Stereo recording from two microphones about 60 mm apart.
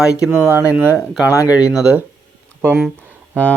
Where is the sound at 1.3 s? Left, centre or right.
Left.